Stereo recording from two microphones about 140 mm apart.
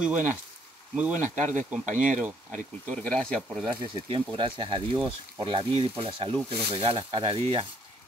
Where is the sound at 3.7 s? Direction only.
35° right (ahead or behind).